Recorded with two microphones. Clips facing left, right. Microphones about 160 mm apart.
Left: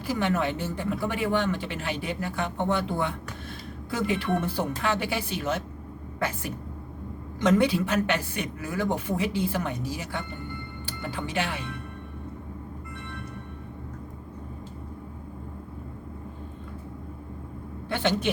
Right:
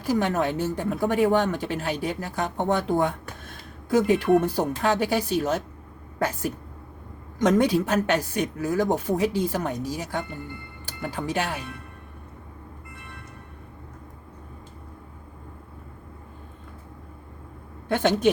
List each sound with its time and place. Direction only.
0.0 s speech: 40° right (ahead or behind)
17.8 s speech: 45° right (ahead or behind)